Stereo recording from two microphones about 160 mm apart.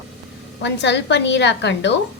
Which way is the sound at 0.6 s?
90° left.